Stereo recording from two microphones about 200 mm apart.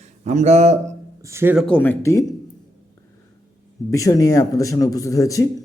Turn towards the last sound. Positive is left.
turn(degrees=15)  # may be behind; listen again after turning